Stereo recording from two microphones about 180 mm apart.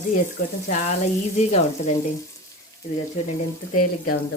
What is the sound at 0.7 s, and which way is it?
Frying, 40° left (ahead or behind).